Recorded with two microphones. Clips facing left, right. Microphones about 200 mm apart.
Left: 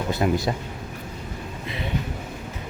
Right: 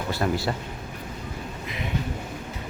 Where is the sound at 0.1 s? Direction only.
20° left (ahead or behind).